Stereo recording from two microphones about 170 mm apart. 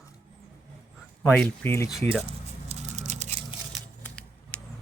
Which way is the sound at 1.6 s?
15° left (ahead or behind).